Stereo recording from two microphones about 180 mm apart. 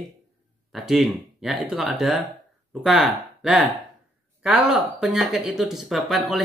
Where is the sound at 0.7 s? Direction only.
Centre (ahead or behind).